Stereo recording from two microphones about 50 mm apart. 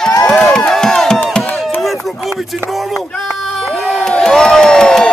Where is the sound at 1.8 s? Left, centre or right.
Centre.